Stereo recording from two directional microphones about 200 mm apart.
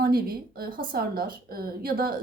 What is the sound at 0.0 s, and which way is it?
A woman's voice, 50° right (ahead or behind).